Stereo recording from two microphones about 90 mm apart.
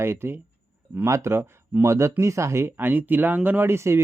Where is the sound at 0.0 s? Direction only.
30° right (ahead or behind).